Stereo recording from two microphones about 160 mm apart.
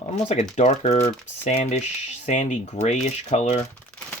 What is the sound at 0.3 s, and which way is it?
Speech, 45° left (ahead or behind).